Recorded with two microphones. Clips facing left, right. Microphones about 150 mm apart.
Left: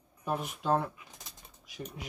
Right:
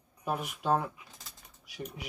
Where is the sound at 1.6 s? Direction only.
10° right (ahead or behind).